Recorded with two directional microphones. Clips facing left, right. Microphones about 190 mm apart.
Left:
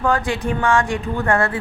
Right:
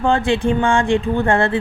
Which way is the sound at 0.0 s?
25° right (ahead or behind).